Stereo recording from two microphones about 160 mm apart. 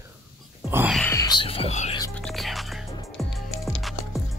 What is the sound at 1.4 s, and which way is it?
Speech, 35° left (ahead or behind).